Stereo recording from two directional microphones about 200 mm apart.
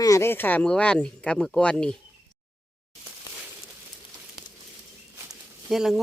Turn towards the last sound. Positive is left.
turn(degrees=0)  # may be behind; listen again after turning